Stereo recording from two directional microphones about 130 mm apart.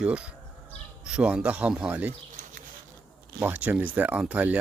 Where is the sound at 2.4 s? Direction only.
75° right (ahead or behind).